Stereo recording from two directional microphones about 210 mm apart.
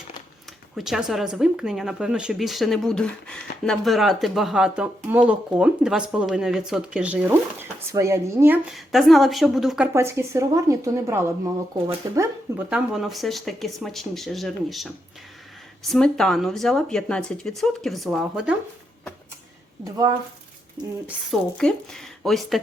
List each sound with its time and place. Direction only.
0.8 s speech: centre (ahead or behind)
20.8 s speech: 20° right (ahead or behind)
21.1 s speech: centre (ahead or behind)